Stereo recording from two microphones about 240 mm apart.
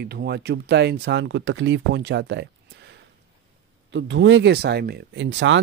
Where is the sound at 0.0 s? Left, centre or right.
Right.